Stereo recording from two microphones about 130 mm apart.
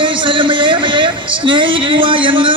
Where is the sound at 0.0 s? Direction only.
40° right (ahead or behind).